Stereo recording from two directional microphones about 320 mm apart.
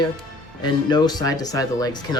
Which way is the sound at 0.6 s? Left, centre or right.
Centre.